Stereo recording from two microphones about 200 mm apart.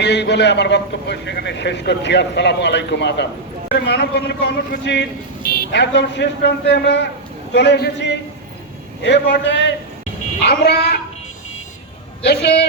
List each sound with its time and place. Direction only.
0.0 s a man's voice: 60° left (ahead or behind)
12.2 s a man's voice: 55° left (ahead or behind)